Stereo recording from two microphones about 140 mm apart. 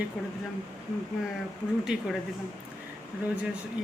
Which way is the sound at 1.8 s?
5° right (ahead or behind).